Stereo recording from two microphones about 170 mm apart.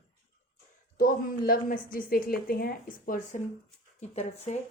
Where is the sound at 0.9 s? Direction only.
55° left (ahead or behind).